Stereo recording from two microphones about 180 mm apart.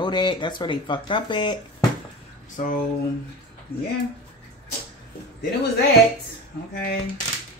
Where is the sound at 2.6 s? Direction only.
45° left (ahead or behind).